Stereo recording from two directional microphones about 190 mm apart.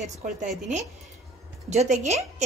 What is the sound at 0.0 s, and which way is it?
Speech, 40° right (ahead or behind).